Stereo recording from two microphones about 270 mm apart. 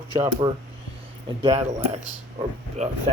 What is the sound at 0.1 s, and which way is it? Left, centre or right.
Speech, centre.